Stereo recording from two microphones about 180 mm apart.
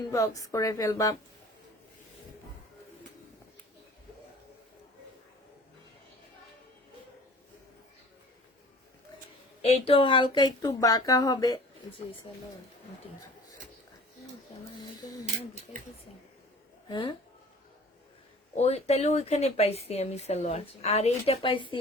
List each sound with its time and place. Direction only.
0.1 s speech: 20° left (ahead or behind)
9.6 s speech: 35° left (ahead or behind)
16.9 s speech: 25° left (ahead or behind)
18.5 s speech: 35° left (ahead or behind)